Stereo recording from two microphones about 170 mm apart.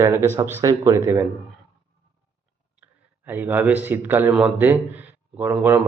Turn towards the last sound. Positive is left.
turn(degrees=-10)  # may be behind; listen again after turning